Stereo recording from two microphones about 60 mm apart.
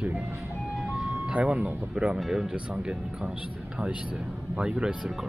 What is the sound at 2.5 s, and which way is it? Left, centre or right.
Speech, centre.